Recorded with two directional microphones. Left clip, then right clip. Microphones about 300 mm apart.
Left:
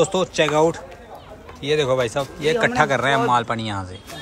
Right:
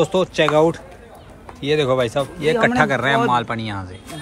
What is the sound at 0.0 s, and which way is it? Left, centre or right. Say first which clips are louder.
Speech: right 2 dB; centre.